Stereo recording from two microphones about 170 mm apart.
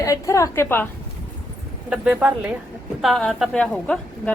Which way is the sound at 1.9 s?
5° right (ahead or behind).